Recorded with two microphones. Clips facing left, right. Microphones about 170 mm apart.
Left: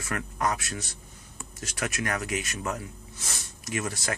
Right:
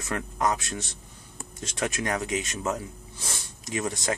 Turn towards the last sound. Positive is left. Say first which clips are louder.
# right 3 dB
turn(degrees=-20)  # may be behind; listen again after turning